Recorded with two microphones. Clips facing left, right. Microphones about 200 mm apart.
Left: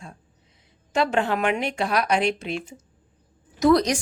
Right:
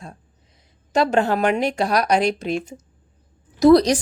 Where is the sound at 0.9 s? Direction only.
40° right (ahead or behind).